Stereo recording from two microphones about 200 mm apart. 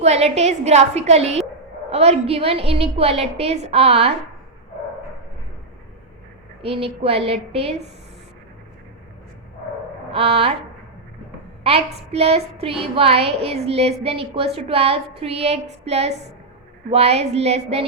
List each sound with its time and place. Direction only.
0.0 s a woman's voice: 35° right (ahead or behind)
6.6 s a woman's voice: 30° right (ahead or behind)
10.1 s a sound: 30° right (ahead or behind)
11.6 s a woman's voice: 30° right (ahead or behind)